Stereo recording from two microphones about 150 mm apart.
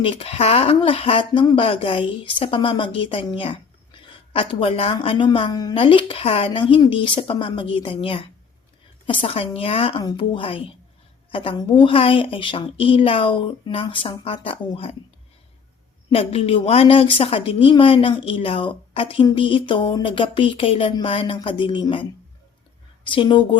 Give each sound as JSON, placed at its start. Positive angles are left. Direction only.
{"t": 0.0, "sound": "a woman's voice", "side_deg": 40}
{"t": 16.0, "sound": "a woman's voice", "side_deg": 40}
{"t": 23.0, "sound": "a woman's voice", "side_deg": 35}